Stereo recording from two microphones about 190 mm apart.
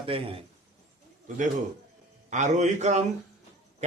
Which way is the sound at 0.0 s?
30° right (ahead or behind).